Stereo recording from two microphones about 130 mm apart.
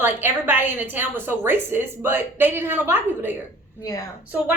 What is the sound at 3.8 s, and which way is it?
Speech, 25° left (ahead or behind).